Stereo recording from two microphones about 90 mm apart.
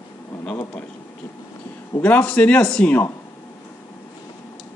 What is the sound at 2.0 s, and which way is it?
Speech, 15° left (ahead or behind).